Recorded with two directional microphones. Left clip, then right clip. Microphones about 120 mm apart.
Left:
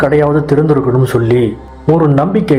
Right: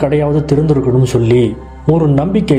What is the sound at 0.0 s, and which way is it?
A man's voice, 45° right (ahead or behind).